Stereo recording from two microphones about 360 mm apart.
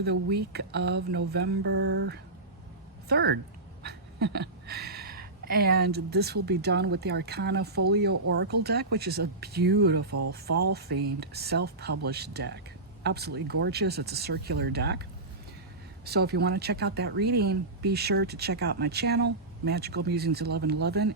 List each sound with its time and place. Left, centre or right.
0.0 s speech: right
10.1 s speech: right
10.3 s speech: right
16.0 s speech: right